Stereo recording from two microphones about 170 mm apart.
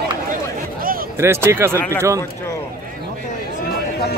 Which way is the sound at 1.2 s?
15° right (ahead or behind).